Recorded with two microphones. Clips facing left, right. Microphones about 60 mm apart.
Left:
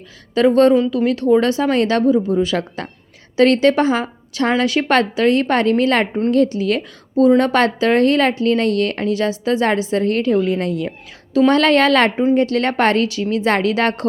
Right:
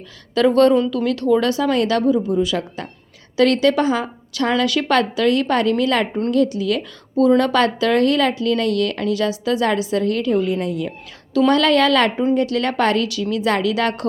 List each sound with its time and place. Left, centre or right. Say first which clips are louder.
0.3 s a woman's voice: left 2 dB; left
3.3 s speech: left 2 dB; left
7.2 s speech: left 2 dB; left